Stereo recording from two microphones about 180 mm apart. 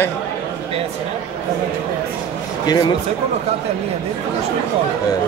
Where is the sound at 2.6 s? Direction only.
25° left (ahead or behind).